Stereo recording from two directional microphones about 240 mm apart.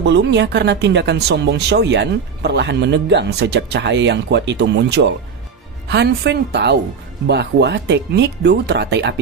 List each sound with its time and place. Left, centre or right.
0.0 s speech: right